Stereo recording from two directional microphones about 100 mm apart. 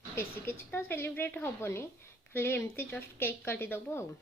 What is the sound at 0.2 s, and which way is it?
Speech, 25° left (ahead or behind).